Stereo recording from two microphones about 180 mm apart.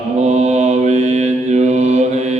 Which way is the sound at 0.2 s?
40° right (ahead or behind).